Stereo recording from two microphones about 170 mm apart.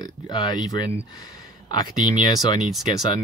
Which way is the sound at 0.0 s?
25° left (ahead or behind).